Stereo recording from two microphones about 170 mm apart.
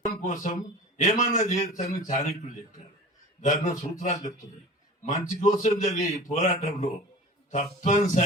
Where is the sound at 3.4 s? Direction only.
45° left (ahead or behind).